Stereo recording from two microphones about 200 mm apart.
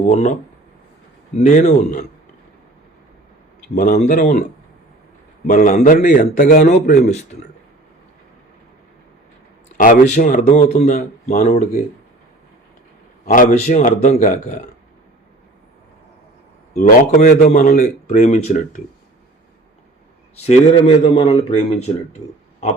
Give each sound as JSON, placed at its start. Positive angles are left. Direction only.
{"t": 0.1, "sound": "a man's voice", "side_deg": 35}
{"t": 1.4, "sound": "a man's voice", "side_deg": 35}
{"t": 3.8, "sound": "speech", "side_deg": 50}
{"t": 4.0, "sound": "a man's voice", "side_deg": 40}
{"t": 5.5, "sound": "a man's voice", "side_deg": 40}
{"t": 9.7, "sound": "a man's voice", "side_deg": 40}
{"t": 13.2, "sound": "a man's voice", "side_deg": 40}
{"t": 17.2, "sound": "a man's voice", "side_deg": 35}
{"t": 20.4, "sound": "a man's voice", "side_deg": 30}